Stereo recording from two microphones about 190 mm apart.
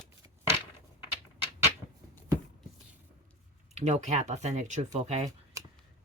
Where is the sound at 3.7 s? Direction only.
35° right (ahead or behind).